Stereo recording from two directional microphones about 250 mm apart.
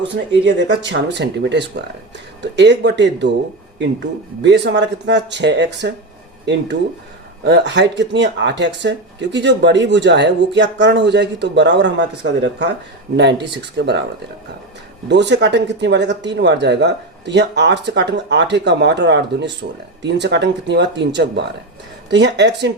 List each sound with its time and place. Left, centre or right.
0.4 s speech: right
4.4 s speech: right
15.1 s speech: right